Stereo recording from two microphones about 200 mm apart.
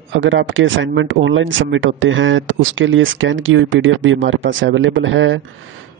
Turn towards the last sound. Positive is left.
turn(degrees=-70)  # may be behind; listen again after turning